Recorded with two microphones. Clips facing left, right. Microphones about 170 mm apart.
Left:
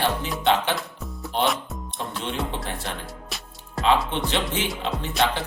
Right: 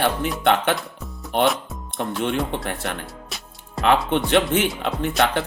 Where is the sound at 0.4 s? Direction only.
55° right (ahead or behind).